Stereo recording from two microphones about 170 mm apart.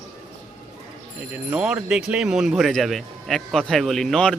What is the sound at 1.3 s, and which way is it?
Speech, 10° right (ahead or behind).